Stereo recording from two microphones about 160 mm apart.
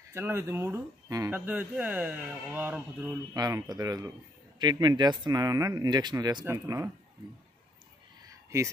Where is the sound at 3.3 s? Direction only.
25° right (ahead or behind).